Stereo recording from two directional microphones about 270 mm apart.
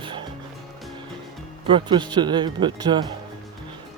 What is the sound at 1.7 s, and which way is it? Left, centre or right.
Speech, centre.